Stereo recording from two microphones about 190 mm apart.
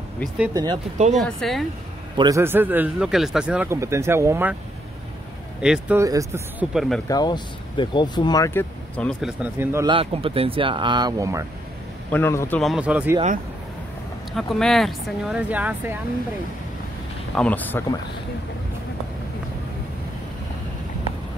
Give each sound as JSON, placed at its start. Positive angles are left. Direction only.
{"t": 1.1, "sound": "speech", "side_deg": 0}
{"t": 2.1, "sound": "a man's voice", "side_deg": -20}
{"t": 5.6, "sound": "speech", "side_deg": -5}
{"t": 5.9, "sound": "a man's voice", "side_deg": -15}
{"t": 6.7, "sound": "speech", "side_deg": 0}
{"t": 7.1, "sound": "speech", "side_deg": 20}
{"t": 9.4, "sound": "a man's voice", "side_deg": -10}
{"t": 9.8, "sound": "speech", "side_deg": -30}
{"t": 12.1, "sound": "speech", "side_deg": 10}
{"t": 14.3, "sound": "speech", "side_deg": 0}
{"t": 17.4, "sound": "speech", "side_deg": 10}